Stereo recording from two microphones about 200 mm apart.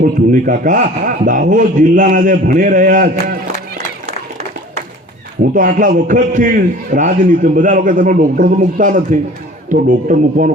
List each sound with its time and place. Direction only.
0.0 s a man's voice: 45° right (ahead or behind)
5.5 s a man's voice: 40° right (ahead or behind)